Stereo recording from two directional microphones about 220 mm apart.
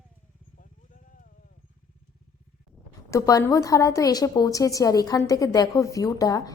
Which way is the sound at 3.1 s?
15° left (ahead or behind).